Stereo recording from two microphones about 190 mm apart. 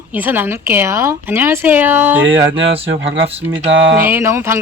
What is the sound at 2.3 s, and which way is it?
Speech, 85° right.